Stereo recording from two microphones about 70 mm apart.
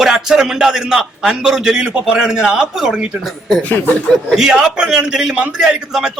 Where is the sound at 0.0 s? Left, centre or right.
Centre.